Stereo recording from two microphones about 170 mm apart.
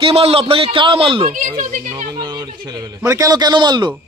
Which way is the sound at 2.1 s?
25° right (ahead or behind).